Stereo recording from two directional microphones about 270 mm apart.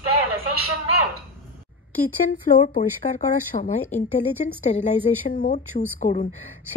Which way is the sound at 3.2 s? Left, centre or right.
Left.